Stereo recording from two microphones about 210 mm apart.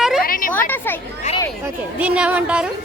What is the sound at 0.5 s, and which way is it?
Speech, 10° left (ahead or behind).